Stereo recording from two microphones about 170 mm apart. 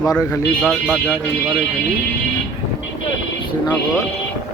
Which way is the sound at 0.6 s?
Centre (ahead or behind).